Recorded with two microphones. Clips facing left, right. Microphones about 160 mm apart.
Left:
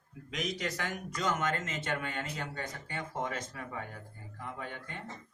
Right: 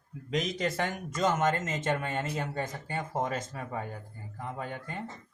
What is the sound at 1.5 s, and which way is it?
Speech, 30° right (ahead or behind).